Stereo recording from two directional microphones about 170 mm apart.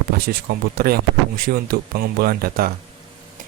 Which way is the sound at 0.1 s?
65° right (ahead or behind).